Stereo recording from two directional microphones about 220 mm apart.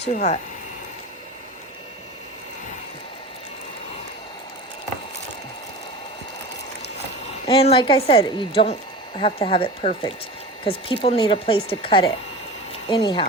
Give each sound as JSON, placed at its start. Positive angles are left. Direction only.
{"t": 0.0, "sound": "speech", "side_deg": 30}
{"t": 7.4, "sound": "speech", "side_deg": 25}